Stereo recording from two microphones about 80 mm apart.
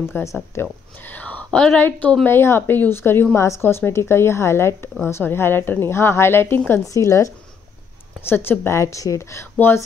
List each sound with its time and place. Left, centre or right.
0.2 s speech: left; by 1.8 s centre
1.8 s speech: left
6.9 s speech: left
8.3 s speech: left